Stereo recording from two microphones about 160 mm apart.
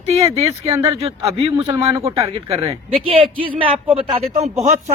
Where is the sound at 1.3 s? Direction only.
35° right (ahead or behind).